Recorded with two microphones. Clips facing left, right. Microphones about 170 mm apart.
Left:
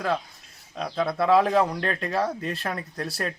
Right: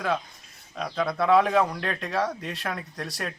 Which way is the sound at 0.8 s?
5° left (ahead or behind).